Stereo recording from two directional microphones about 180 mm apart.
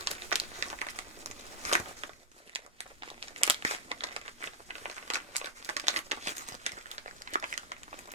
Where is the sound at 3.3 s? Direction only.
35° right (ahead or behind).